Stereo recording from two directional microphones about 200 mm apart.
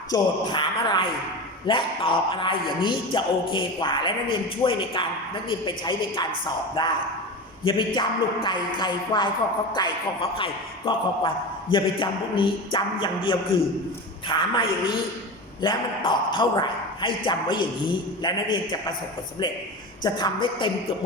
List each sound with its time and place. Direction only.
0.1 s speech: 20° left (ahead or behind)
20.0 s speech: 20° left (ahead or behind)